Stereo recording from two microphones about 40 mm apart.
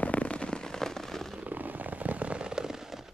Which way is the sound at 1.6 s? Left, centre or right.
Right.